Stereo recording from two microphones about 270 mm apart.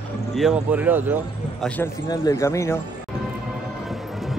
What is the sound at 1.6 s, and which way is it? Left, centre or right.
Speech, centre.